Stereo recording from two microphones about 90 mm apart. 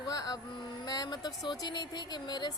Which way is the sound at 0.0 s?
45° left (ahead or behind).